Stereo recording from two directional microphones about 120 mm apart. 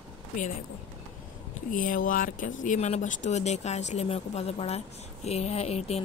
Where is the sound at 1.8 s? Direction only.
90° left.